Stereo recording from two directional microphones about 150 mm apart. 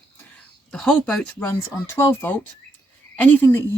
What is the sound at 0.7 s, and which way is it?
Speech, 5° left (ahead or behind).